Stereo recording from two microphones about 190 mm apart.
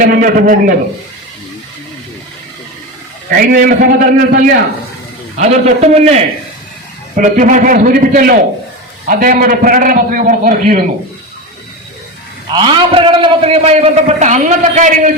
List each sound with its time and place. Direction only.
0.0 s a man's voice: 50° right (ahead or behind)
3.2 s a man's voice: 50° right (ahead or behind)
5.4 s a man's voice: 35° right (ahead or behind)
7.2 s a man's voice: 45° right (ahead or behind)
12.5 s a man's voice: 25° right (ahead or behind); by 15.1 s 40° right (ahead or behind)